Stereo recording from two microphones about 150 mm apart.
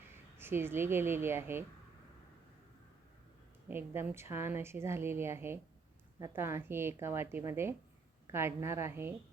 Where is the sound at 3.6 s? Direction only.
15° right (ahead or behind).